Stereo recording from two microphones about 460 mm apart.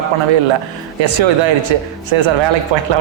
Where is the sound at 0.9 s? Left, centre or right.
Right.